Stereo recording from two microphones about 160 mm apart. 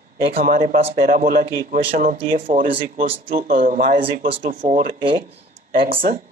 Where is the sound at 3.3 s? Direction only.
60° right (ahead or behind).